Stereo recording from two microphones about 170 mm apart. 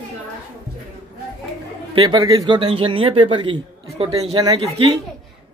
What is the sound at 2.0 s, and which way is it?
Speech, 25° right (ahead or behind).